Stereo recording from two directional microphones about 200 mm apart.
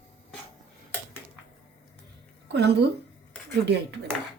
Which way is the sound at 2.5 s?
55° right (ahead or behind).